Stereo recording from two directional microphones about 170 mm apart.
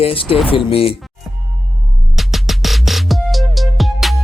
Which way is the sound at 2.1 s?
Centre (ahead or behind).